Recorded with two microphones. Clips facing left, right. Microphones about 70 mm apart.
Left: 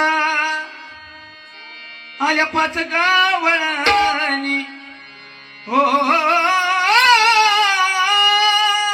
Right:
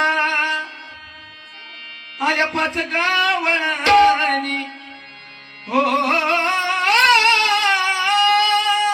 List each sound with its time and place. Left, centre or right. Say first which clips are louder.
0.0 s music: left 1 dB; left
2.1 s music: left 2 dB; left
5.7 s music: left 3 dB; left
6.5 s a sound: left 3 dB; left